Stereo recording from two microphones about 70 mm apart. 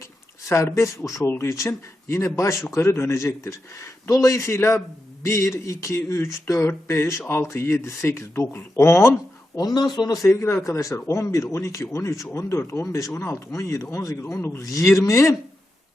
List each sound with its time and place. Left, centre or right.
0.4 s speech: left
9.6 s a man's voice: left
10.7 s speech: left